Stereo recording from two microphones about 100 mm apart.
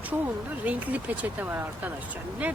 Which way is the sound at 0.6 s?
15° right (ahead or behind).